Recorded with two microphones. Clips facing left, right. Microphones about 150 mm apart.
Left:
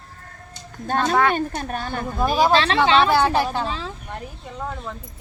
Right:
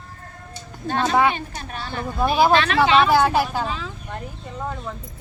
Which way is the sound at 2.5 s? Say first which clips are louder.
Even; 30° left (ahead or behind).